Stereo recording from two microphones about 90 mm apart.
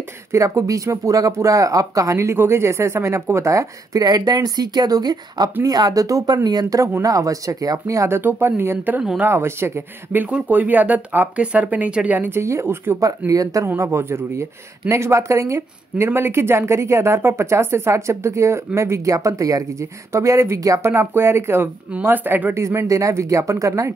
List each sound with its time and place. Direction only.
0.3 s speech: 35° right (ahead or behind)
8.2 s speech: 25° right (ahead or behind)
12.4 s speech: 30° right (ahead or behind)
13.3 s speech: 40° right (ahead or behind)